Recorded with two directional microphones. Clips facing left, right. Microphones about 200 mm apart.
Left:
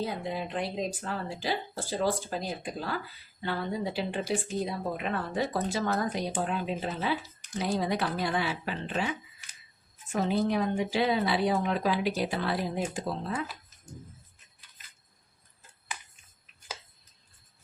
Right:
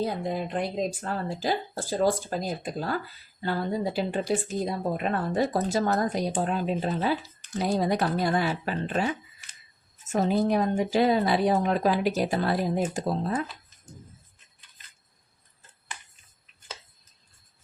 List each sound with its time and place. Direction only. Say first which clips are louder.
0.0 s a woman's voice: right 4 dB; 45° right (ahead or behind)